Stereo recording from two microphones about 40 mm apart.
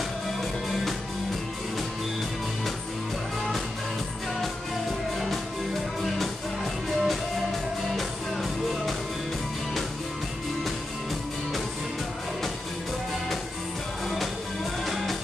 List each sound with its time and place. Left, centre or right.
6.1 s music: centre
14.9 s music: centre